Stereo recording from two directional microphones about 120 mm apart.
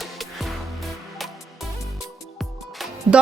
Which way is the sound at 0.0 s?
Centre (ahead or behind).